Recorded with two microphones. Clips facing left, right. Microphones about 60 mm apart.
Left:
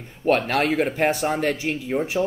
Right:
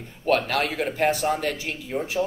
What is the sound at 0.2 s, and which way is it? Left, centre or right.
Speech, left.